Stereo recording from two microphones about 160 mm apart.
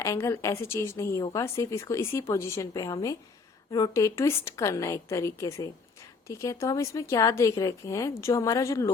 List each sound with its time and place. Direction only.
0.0 s a woman's voice: 20° left (ahead or behind)